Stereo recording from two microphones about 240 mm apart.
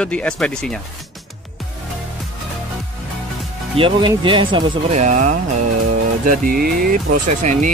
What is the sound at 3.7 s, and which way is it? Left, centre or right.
Speech, right.